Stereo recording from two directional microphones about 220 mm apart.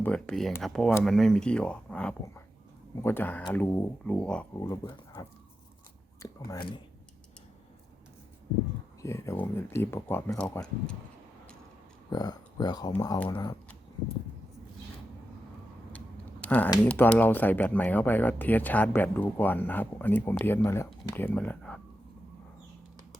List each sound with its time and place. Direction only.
0.0 s speech: 5° left (ahead or behind)
6.2 s speech: 20° left (ahead or behind)
9.0 s speech: 15° left (ahead or behind)
12.1 s speech: 20° left (ahead or behind)
16.4 s speech: 5° left (ahead or behind)